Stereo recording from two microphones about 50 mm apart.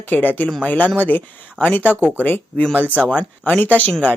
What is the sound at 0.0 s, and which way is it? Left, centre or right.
Speech, left.